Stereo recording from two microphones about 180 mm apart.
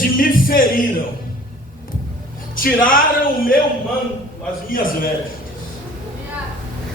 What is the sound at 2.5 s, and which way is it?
Speech, 50° left (ahead or behind).